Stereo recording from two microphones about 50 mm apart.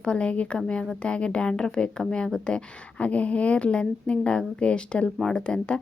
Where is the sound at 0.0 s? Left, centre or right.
Centre.